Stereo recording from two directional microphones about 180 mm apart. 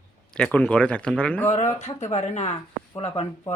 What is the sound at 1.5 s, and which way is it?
Speech, 40° left (ahead or behind).